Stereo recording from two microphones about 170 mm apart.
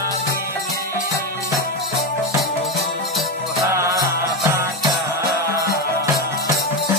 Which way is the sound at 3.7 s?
15° right (ahead or behind).